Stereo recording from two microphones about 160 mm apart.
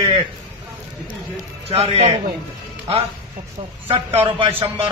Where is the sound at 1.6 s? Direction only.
40° right (ahead or behind).